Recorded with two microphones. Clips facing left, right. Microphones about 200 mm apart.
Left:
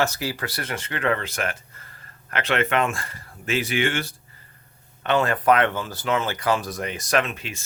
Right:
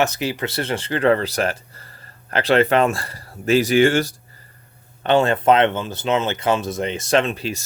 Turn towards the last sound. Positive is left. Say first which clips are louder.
# right 5 dB
turn(degrees=-35)  # may be behind; listen again after turning